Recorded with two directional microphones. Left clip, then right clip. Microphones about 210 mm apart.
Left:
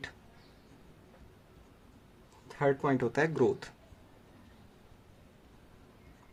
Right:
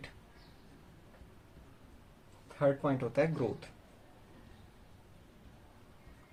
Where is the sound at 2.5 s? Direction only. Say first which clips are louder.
Left 2 dB; 50° left (ahead or behind).